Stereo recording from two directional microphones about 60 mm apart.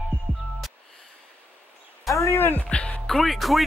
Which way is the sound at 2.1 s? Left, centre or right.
Left.